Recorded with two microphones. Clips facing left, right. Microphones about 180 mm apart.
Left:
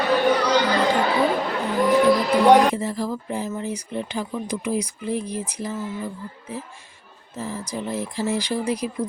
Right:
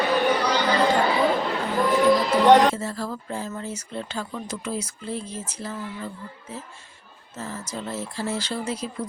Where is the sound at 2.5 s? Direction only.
15° left (ahead or behind).